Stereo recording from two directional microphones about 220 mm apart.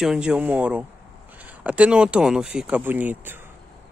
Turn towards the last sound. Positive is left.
turn(degrees=-5)  # may be behind; listen again after turning